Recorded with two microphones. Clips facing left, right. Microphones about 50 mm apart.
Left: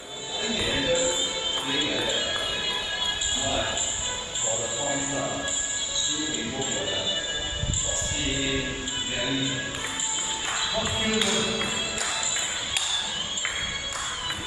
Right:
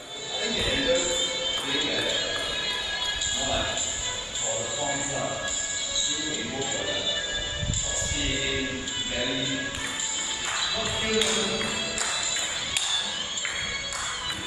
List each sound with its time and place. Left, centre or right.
0.4 s music: centre
3.4 s music: centre
4.7 s music: centre
6.6 s music: centre
8.2 s music: centre